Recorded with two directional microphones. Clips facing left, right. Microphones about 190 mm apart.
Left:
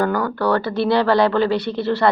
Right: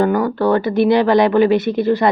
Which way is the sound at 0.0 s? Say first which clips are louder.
Right 4 dB; 20° right (ahead or behind).